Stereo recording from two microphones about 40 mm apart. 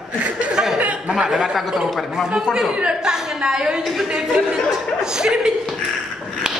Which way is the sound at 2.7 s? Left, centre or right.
Right.